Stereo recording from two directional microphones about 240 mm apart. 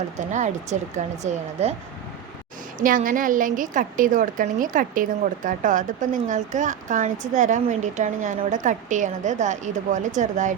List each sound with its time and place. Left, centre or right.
0.2 s speech: right
2.7 s a woman's voice: right